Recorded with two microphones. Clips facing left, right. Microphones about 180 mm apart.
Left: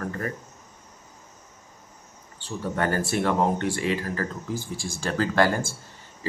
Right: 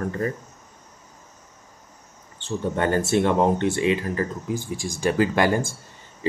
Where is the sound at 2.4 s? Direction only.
25° right (ahead or behind).